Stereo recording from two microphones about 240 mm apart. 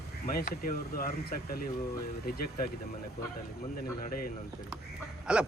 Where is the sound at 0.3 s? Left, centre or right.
Left.